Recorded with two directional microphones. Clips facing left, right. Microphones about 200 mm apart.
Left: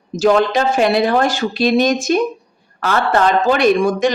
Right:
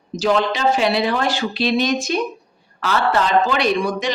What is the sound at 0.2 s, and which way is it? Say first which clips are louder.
Speech: left 5 dB; 50° left (ahead or behind).